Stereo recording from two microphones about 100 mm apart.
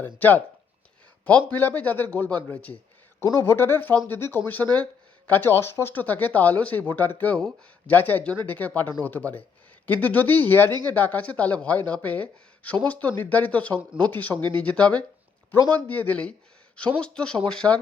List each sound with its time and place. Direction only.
0.0 s speech: 15° left (ahead or behind)
3.2 s speech: 25° left (ahead or behind); by 17.7 s 5° left (ahead or behind)